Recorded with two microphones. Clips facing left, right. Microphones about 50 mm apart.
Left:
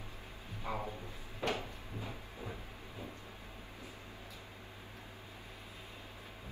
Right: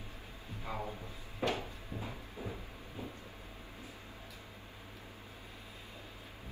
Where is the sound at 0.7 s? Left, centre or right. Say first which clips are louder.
Left 1 dB; left.